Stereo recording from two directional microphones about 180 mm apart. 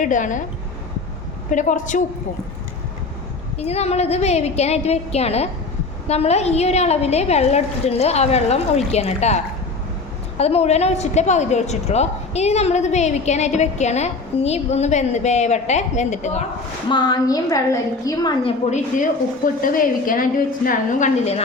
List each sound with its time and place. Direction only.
0.0 s a woman's voice: 45° left (ahead or behind)
1.5 s a woman's voice: 45° left (ahead or behind)
3.6 s a woman's voice: 35° left (ahead or behind)
16.9 s a woman's voice: 25° left (ahead or behind)
19.6 s a woman's voice: 50° left (ahead or behind)